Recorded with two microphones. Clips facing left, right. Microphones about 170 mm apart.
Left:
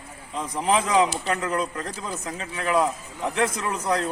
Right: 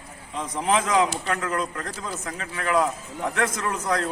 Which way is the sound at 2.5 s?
20° left (ahead or behind).